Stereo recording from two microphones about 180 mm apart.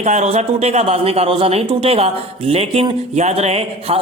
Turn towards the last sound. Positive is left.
turn(degrees=-35)  # may be behind; listen again after turning